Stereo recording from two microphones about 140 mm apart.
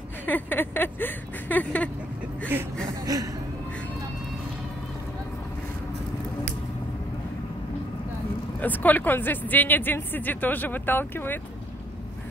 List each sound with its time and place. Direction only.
0.3 s speech: 15° left (ahead or behind)
3.1 s speech: 25° right (ahead or behind)
8.5 s speech: 10° left (ahead or behind)